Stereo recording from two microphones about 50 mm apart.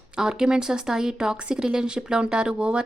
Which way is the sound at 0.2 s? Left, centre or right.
Centre.